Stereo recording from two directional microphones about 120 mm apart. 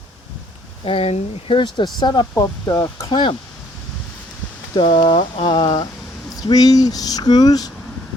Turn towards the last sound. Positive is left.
turn(degrees=35)  # may be behind; listen again after turning